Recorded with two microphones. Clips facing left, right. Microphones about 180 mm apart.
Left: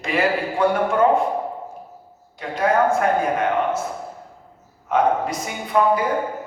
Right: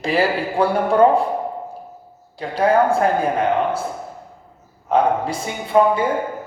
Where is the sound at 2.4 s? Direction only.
30° right (ahead or behind).